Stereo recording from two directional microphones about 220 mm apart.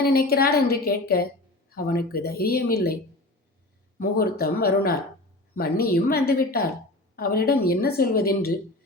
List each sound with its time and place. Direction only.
0.0 s a woman's voice: 45° left (ahead or behind)